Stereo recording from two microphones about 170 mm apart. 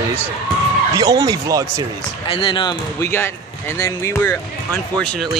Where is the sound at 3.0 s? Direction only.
15° left (ahead or behind).